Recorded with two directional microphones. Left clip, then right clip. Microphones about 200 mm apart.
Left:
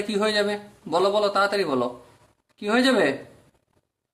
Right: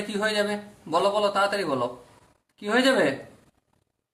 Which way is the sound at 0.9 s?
35° left (ahead or behind).